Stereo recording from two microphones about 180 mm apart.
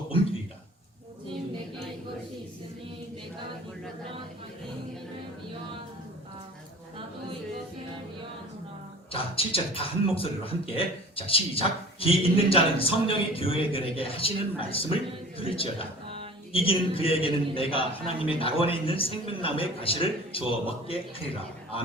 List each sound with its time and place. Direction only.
9.1 s speech: 30° left (ahead or behind)